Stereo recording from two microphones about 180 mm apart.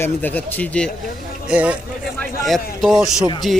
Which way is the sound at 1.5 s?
5° right (ahead or behind).